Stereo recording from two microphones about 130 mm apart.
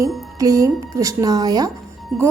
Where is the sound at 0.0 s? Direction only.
25° right (ahead or behind).